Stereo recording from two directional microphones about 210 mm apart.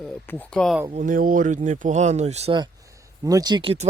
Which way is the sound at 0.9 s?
40° right (ahead or behind).